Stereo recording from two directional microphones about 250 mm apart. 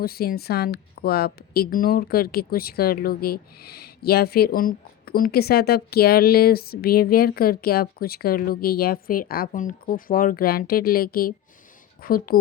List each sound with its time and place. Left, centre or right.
0.0 s a woman's voice: left